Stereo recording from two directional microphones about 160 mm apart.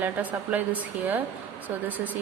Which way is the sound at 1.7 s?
10° right (ahead or behind).